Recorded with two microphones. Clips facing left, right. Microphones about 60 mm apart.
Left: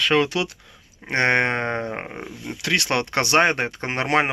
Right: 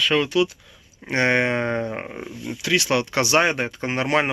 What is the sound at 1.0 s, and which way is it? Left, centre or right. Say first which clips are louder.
Speech: even; left.